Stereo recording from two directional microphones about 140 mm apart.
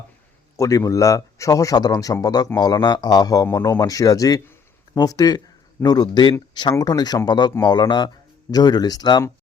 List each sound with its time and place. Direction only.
0.5 s speech: 20° left (ahead or behind)